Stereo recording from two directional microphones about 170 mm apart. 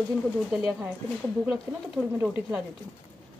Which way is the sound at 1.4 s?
5° right (ahead or behind).